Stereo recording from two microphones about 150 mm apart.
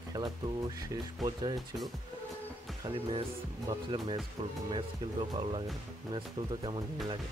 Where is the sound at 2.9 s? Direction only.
35° right (ahead or behind).